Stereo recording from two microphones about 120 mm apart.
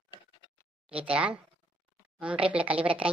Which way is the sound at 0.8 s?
10° right (ahead or behind).